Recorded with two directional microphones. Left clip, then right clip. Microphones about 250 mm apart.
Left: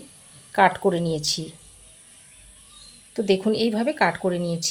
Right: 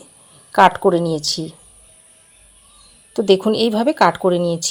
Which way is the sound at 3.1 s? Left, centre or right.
Centre.